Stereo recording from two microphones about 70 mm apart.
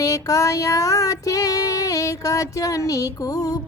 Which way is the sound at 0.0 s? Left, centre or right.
Left.